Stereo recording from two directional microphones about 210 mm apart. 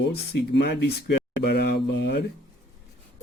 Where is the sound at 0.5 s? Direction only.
50° left (ahead or behind).